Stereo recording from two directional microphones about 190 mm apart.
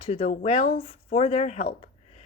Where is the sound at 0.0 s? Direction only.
35° left (ahead or behind).